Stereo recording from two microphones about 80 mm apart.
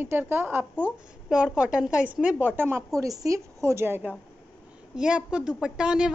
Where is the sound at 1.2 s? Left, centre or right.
Centre.